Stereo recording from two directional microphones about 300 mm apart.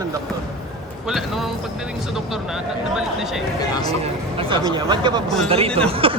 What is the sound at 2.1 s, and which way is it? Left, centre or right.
Speech, centre.